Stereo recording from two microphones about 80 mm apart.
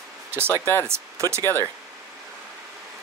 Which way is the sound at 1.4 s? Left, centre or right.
Left.